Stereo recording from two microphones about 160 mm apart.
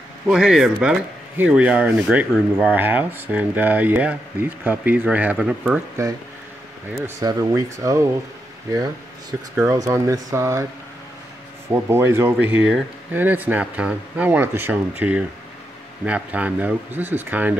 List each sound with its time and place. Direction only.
0.3 s speech: 5° right (ahead or behind)
7.2 s speech: 25° right (ahead or behind)
9.3 s speech: 15° right (ahead or behind)
11.7 s speech: 15° right (ahead or behind)